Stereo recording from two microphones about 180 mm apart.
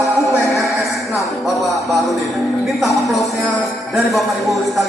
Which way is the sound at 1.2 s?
Centre (ahead or behind).